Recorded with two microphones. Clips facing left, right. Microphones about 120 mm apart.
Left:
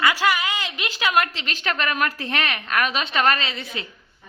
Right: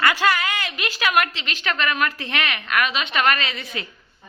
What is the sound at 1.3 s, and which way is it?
A woman's voice, 40° left (ahead or behind).